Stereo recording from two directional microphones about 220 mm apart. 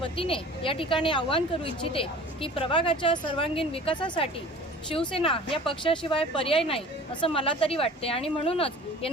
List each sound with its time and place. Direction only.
0.0 s speech: 25° left (ahead or behind)